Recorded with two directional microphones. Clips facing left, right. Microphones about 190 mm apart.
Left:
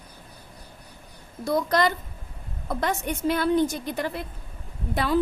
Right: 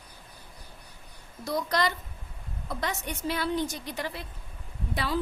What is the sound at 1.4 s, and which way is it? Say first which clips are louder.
A woman's voice: left 5 dB; 50° left (ahead or behind).